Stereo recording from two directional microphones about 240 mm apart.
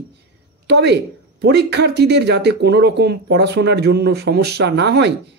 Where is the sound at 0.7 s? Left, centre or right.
Right.